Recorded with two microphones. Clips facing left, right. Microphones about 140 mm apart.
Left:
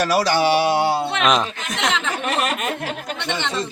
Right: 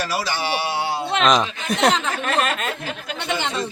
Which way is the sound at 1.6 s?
35° right (ahead or behind).